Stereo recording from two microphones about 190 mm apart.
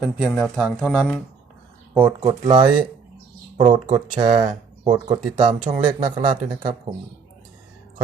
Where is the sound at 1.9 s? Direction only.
10° right (ahead or behind).